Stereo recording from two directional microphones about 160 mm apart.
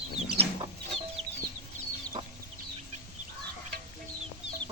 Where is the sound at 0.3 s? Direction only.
35° right (ahead or behind).